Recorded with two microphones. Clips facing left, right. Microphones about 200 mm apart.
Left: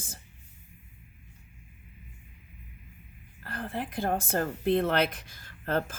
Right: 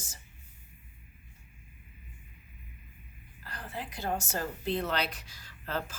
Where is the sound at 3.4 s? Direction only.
55° left (ahead or behind).